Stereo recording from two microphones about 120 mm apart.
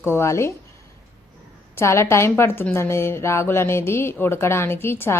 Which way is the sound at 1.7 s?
20° left (ahead or behind).